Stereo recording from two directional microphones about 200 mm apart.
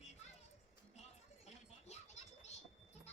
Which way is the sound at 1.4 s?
35° left (ahead or behind).